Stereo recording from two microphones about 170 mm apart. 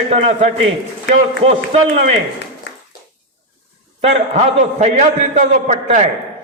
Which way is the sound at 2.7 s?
90° left.